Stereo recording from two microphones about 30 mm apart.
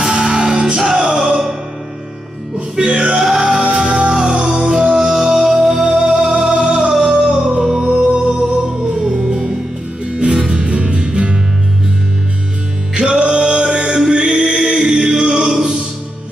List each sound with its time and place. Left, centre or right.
0.0 s music: right
0.9 s music: centre
3.1 s music: centre
3.7 s music: right
6.9 s music: centre
7.8 s music: right
9.0 s music: right
10.5 s music: right
12.9 s music: right
14.7 s music: right